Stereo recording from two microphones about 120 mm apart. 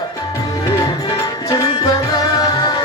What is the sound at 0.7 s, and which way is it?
Music, 25° left (ahead or behind).